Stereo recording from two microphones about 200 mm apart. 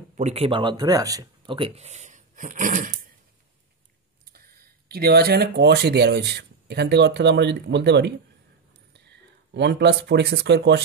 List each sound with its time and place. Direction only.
0.1 s speech: 35° right (ahead or behind)
4.3 s speech: 50° right (ahead or behind)